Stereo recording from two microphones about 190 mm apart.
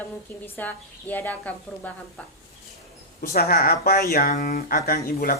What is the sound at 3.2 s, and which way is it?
Speech, 55° left (ahead or behind).